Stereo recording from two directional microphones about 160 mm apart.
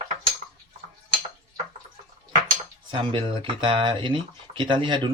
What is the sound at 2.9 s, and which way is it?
A man's voice, 30° right (ahead or behind).